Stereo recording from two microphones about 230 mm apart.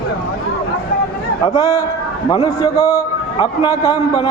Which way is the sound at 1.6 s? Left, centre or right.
Centre.